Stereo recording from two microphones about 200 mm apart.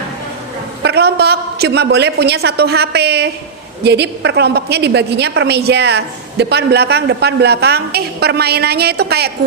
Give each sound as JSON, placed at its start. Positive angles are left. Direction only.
{"t": 0.8, "sound": "a woman's voice", "side_deg": -55}